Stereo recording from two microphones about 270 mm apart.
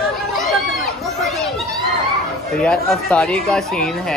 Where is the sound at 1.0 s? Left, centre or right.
Centre.